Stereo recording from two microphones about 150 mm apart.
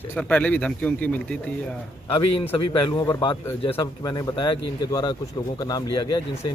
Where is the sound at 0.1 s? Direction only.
10° left (ahead or behind).